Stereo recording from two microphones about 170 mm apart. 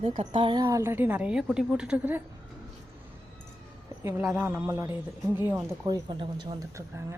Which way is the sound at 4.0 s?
15° right (ahead or behind).